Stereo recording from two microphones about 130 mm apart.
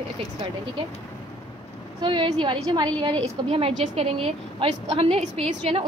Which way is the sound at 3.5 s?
50° right (ahead or behind).